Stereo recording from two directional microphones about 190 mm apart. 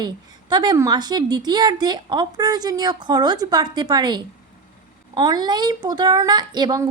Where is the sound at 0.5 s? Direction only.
20° right (ahead or behind).